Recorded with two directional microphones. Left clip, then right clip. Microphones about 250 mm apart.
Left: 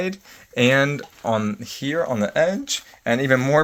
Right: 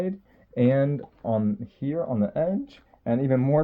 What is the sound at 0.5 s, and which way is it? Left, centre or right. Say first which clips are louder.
Speech: left 5 dB; centre.